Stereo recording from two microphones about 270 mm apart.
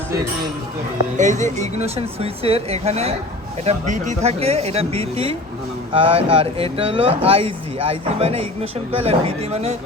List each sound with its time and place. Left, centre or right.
1.1 s speech: right